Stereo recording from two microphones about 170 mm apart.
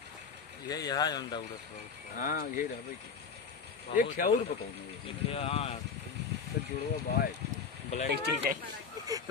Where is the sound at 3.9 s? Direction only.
55° left (ahead or behind).